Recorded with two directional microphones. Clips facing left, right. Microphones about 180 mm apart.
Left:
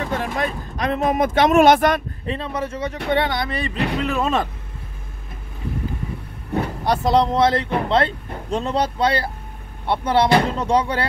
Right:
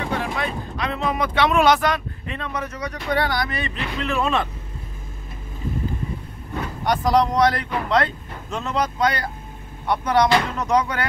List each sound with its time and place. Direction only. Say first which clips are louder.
0.1 s speech: left 2 dB; 45° left (ahead or behind)
2.2 s speech: left 4 dB; 30° left (ahead or behind)
6.8 s speech: even; 30° left (ahead or behind)